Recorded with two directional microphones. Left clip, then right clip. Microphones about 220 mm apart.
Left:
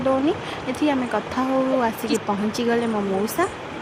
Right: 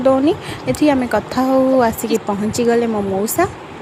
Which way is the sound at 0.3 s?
25° right (ahead or behind).